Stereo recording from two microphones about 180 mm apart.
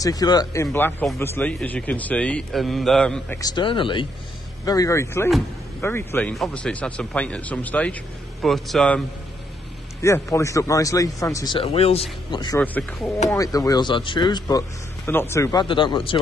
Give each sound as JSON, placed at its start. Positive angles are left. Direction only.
{"t": 0.0, "sound": "a man's voice", "side_deg": 20}
{"t": 3.3, "sound": "a man's voice", "side_deg": 25}
{"t": 10.0, "sound": "speech", "side_deg": 15}
{"t": 12.5, "sound": "a man's voice", "side_deg": 10}
{"t": 15.0, "sound": "speech", "side_deg": 15}